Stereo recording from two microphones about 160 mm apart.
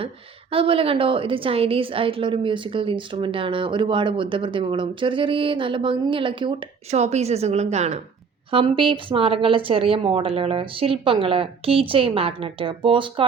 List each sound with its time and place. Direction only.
0.5 s a woman's voice: 35° right (ahead or behind)
6.9 s a woman's voice: 45° right (ahead or behind)